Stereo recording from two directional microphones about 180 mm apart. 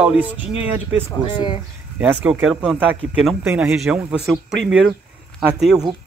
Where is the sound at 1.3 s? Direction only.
25° left (ahead or behind).